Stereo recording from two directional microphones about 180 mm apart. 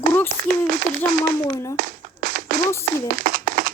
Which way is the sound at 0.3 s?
50° right (ahead or behind).